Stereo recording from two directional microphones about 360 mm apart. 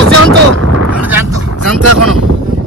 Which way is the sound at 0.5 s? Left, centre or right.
Right.